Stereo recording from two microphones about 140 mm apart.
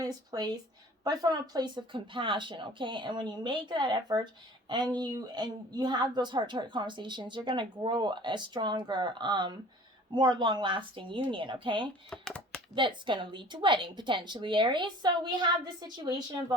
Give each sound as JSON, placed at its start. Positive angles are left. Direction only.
{"t": 0.0, "sound": "a woman's voice", "side_deg": -25}
{"t": 12.1, "sound": "computer keyboard", "side_deg": 5}
{"t": 12.7, "sound": "a woman's voice", "side_deg": -35}